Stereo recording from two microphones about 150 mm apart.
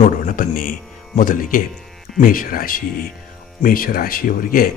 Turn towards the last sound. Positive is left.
turn(degrees=70)  # may be behind; listen again after turning